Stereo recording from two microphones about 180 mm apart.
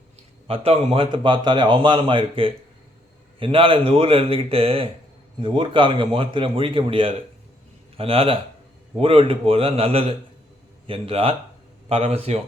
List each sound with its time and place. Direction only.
0.4 s a man's voice: 35° right (ahead or behind)